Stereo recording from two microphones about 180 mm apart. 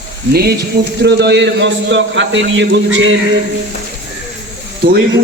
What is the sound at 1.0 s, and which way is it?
A man's voice, 70° right (ahead or behind).